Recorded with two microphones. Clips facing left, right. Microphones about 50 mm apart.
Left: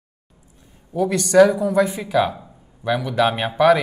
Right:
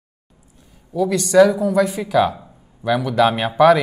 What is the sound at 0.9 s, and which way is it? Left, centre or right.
Speech, left.